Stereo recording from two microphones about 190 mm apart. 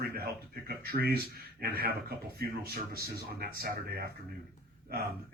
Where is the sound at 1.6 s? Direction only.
55° right (ahead or behind).